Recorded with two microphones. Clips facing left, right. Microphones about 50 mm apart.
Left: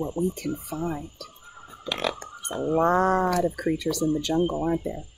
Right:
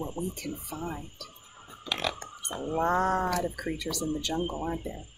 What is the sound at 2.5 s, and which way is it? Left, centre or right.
Speech, left.